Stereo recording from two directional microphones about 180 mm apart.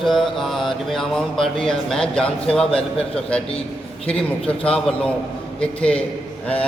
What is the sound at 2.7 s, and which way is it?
Speech, 30° left (ahead or behind).